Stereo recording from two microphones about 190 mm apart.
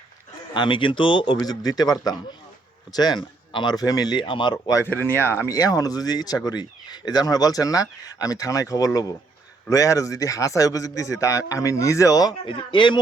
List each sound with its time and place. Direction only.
0.5 s a man's voice: 25° left (ahead or behind)